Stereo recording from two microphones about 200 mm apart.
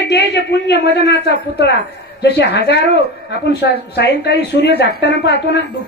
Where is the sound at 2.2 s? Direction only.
55° left (ahead or behind).